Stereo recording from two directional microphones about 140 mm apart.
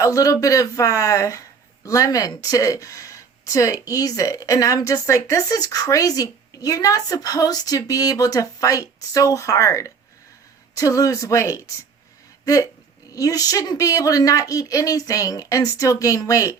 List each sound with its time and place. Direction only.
0.0 s speech: 25° left (ahead or behind)
13.1 s speech: 25° left (ahead or behind)